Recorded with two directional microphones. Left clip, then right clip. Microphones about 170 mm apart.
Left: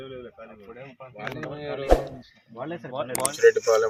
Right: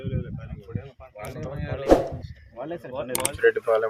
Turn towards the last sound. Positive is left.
turn(degrees=0)  # may be behind; listen again after turning